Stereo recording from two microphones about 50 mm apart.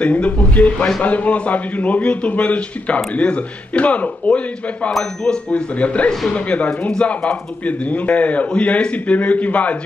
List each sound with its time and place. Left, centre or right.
0.0 s a man's voice: left